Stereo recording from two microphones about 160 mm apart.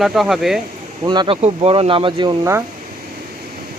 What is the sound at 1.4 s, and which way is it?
Speech, 40° right (ahead or behind).